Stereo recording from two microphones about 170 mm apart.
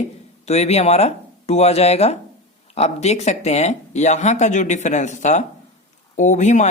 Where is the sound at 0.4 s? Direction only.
40° left (ahead or behind).